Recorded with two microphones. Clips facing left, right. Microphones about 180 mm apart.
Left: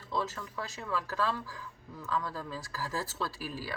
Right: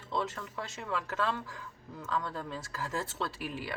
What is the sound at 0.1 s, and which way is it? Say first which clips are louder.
Speech: even; 25° right (ahead or behind).